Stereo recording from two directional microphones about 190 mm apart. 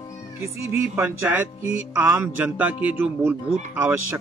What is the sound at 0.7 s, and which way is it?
A man's voice, 10° right (ahead or behind).